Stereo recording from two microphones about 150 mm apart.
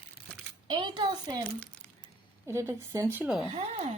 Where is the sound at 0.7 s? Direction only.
30° right (ahead or behind).